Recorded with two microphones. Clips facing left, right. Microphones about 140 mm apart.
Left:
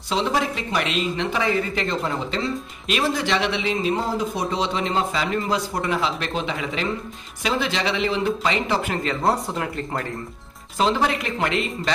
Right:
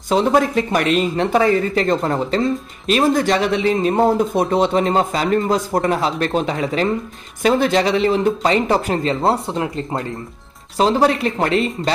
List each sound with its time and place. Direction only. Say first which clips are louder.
0.1 s speech: right 8 dB; 50° right (ahead or behind); by 10.0 s 25° right (ahead or behind)
10.8 s speech: right 6 dB; 35° right (ahead or behind)